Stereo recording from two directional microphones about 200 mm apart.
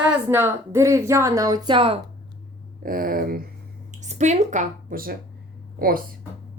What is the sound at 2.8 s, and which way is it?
Speech, 45° right (ahead or behind).